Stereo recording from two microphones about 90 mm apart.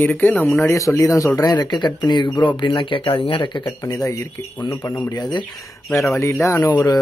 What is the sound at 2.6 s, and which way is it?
Speech, 70° left (ahead or behind).